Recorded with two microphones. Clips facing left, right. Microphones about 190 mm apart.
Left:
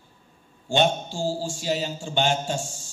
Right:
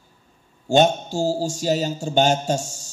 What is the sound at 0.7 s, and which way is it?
A man's voice, 40° right (ahead or behind).